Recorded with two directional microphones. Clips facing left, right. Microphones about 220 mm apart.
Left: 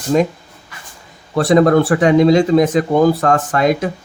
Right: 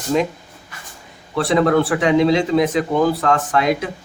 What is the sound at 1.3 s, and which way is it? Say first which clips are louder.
Speech: left 4 dB; 45° left (ahead or behind).